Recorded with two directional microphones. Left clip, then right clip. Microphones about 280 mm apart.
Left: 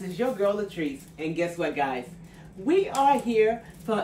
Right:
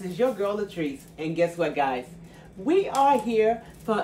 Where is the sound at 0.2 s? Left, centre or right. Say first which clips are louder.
Even; centre.